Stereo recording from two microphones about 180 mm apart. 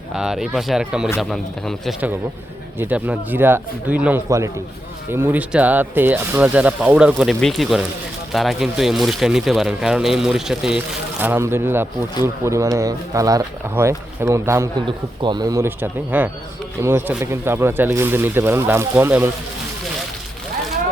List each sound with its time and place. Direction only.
0.2 s speech: 5° right (ahead or behind)
2.7 s speech: 10° right (ahead or behind)
14.8 s speech: 25° right (ahead or behind)